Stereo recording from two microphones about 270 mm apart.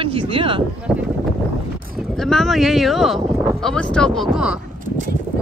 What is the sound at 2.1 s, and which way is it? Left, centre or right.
Speech, centre.